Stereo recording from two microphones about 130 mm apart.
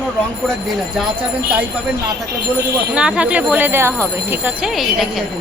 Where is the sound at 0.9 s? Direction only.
10° right (ahead or behind).